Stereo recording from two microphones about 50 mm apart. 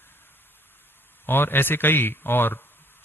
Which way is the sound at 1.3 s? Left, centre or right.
Left.